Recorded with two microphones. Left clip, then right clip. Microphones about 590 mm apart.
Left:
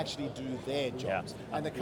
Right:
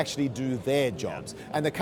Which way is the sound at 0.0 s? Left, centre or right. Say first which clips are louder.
Right 8 dB; right.